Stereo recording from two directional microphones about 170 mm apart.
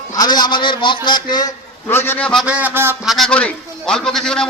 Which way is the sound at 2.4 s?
10° right (ahead or behind).